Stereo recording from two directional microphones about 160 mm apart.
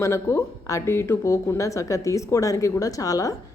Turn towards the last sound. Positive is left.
turn(degrees=20)  # may be behind; listen again after turning